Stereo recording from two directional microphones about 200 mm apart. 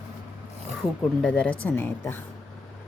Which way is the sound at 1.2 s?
5° left (ahead or behind).